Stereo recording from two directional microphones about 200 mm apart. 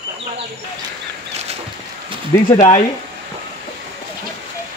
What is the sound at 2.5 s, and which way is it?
Speech, 30° left (ahead or behind).